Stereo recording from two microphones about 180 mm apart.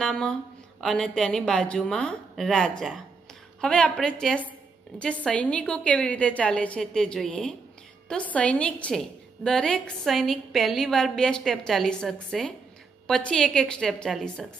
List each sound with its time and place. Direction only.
0.0 s a woman's voice: 5° left (ahead or behind)